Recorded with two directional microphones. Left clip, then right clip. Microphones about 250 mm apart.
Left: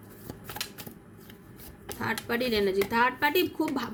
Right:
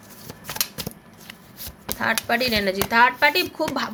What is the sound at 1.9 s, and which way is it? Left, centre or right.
Speech, centre.